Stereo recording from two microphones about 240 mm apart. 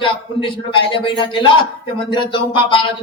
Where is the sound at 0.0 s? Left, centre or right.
Left.